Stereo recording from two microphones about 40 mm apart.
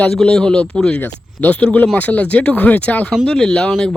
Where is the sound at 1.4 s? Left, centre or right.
Left.